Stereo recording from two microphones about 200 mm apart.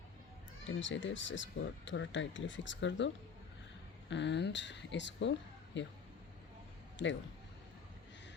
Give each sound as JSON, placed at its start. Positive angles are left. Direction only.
{"t": 0.7, "sound": "speech", "side_deg": 70}
{"t": 4.1, "sound": "speech", "side_deg": 60}